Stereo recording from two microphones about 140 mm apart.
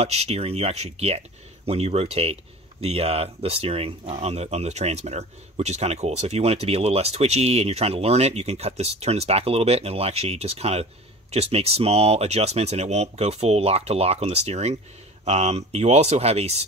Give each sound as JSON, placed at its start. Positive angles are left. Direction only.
{"t": 0.0, "sound": "speech", "side_deg": -50}